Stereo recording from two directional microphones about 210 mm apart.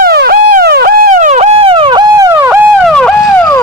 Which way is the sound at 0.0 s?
45° right (ahead or behind).